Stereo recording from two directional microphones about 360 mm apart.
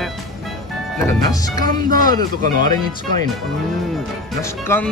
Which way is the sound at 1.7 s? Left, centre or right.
Right.